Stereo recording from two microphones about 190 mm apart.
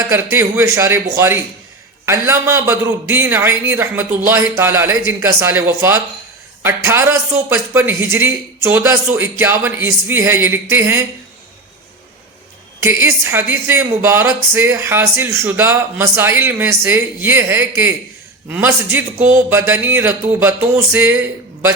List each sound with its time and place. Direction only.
0.1 s speech: 10° right (ahead or behind)
12.8 s speech: 15° right (ahead or behind)